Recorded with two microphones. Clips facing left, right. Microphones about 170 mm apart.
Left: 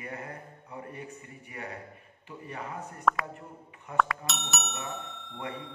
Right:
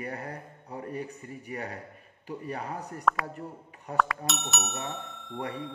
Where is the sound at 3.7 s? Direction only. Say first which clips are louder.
Right 4 dB; 35° right (ahead or behind).